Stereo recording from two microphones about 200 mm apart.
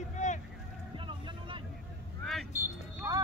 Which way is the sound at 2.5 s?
15° right (ahead or behind).